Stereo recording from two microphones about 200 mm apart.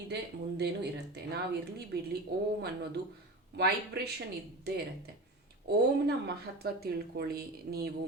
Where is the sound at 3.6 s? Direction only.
55° right (ahead or behind).